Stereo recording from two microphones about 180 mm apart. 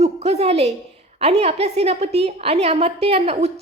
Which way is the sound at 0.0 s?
35° right (ahead or behind).